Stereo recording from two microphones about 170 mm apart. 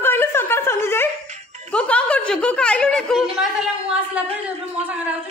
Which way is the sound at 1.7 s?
5° left (ahead or behind).